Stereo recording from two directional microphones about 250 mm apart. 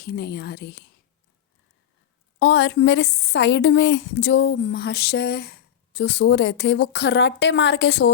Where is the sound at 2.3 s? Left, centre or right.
Left.